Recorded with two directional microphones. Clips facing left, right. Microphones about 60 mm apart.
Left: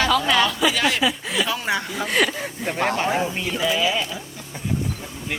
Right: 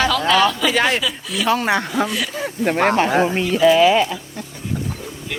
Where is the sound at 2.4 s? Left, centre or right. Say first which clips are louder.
Right 6 dB; right.